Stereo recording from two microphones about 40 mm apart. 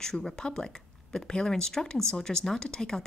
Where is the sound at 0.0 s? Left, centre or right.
Centre.